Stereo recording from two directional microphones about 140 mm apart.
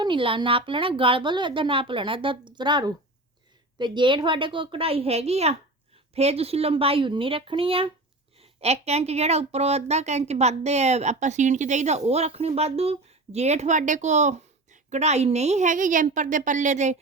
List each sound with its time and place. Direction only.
0.0 s a woman's voice: 35° right (ahead or behind); by 17.0 s 55° right (ahead or behind)